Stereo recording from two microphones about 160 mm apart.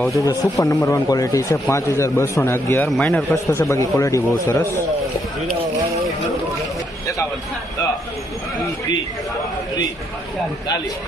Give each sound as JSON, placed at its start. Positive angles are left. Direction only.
{"t": 0.2, "sound": "speech", "side_deg": 20}
{"t": 3.4, "sound": "speech", "side_deg": 20}